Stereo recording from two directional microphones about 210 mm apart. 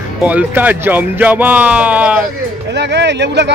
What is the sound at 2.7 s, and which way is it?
Speech, 55° right (ahead or behind).